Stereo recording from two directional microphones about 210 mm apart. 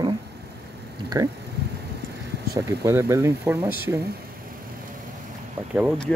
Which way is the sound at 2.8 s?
15° right (ahead or behind).